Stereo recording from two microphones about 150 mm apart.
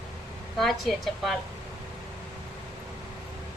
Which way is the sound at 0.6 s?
Centre (ahead or behind).